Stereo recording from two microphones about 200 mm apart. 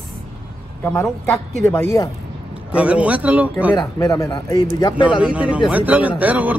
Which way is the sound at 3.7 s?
15° left (ahead or behind).